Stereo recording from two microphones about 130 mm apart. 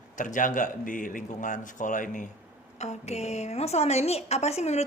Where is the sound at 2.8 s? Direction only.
60° left (ahead or behind).